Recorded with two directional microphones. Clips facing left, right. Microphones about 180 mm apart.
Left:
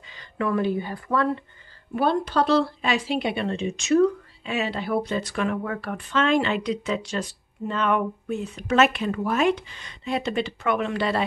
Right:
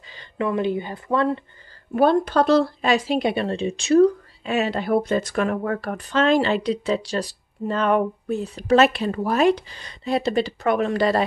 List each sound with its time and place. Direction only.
0.1 s speech: 25° right (ahead or behind)
2.0 s speech: 45° right (ahead or behind)